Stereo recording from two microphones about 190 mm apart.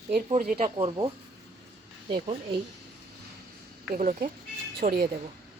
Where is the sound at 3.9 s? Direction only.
45° right (ahead or behind).